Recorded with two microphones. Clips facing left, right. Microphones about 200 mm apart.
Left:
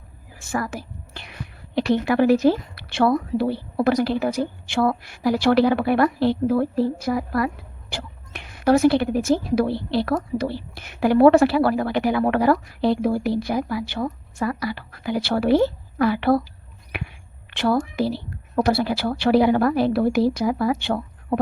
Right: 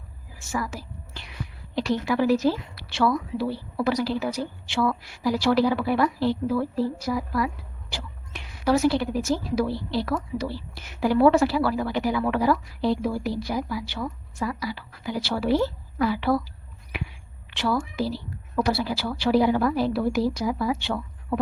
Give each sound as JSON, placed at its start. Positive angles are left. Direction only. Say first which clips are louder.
{"t": 0.3, "sound": "a woman's voice", "louder": "left 3 dB", "side_deg": 55}
{"t": 17.5, "sound": "a woman's voice", "louder": "left 5 dB", "side_deg": 55}